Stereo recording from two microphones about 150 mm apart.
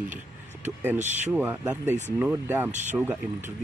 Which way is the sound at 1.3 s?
10° right (ahead or behind).